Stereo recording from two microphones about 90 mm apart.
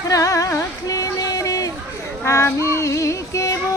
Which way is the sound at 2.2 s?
30° left (ahead or behind).